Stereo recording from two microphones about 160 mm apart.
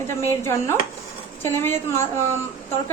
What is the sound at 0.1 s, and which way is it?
A woman's voice, 15° left (ahead or behind).